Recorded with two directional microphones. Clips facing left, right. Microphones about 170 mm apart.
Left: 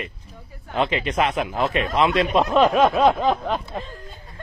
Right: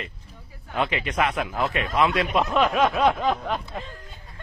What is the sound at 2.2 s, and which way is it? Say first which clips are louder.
Speech: left 4 dB; 35° left (ahead or behind).